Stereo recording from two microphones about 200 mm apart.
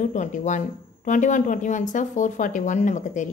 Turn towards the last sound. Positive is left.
turn(degrees=40)  # may be behind; listen again after turning